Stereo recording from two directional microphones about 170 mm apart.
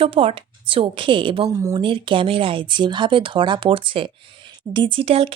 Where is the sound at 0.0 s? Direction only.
35° right (ahead or behind).